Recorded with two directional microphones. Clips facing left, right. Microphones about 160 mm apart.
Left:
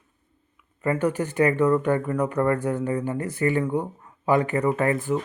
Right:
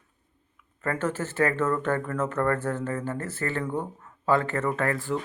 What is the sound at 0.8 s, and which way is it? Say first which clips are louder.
Speech: left 5 dB; 15° left (ahead or behind).